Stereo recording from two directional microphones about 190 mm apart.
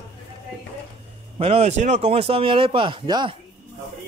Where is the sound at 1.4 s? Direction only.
30° right (ahead or behind).